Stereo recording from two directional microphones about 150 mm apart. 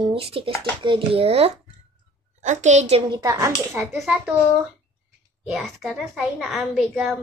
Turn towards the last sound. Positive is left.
turn(degrees=-5)  # may be behind; listen again after turning